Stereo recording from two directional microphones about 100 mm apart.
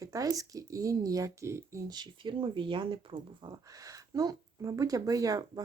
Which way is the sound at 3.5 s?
35° right (ahead or behind).